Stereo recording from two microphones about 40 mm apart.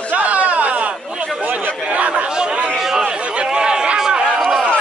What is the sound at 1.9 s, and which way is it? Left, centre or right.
Chatter, right.